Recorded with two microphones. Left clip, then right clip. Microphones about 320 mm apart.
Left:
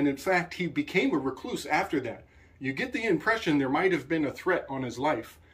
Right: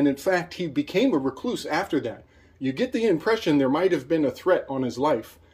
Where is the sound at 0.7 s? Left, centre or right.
Right.